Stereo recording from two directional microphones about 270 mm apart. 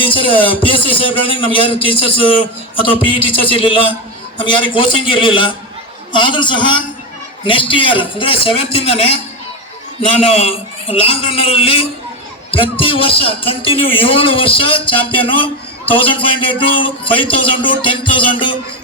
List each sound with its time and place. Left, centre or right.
0.0 s a man's voice: centre